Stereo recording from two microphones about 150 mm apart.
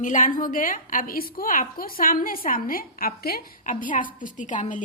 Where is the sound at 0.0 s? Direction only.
60° left (ahead or behind).